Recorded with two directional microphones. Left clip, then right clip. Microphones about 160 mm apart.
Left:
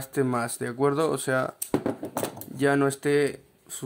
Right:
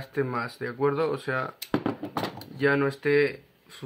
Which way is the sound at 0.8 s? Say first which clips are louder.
Left 2 dB; 90° left.